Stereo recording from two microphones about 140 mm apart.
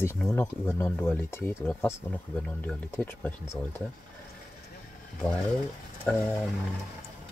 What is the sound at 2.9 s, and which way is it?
Speech, 20° left (ahead or behind).